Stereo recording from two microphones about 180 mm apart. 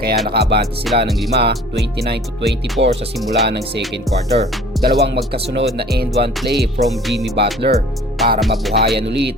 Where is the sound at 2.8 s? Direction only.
30° right (ahead or behind).